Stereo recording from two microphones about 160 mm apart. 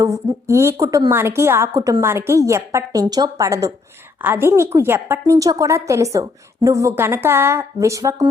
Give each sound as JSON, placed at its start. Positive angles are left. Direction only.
{"t": 0.0, "sound": "a woman's voice", "side_deg": -20}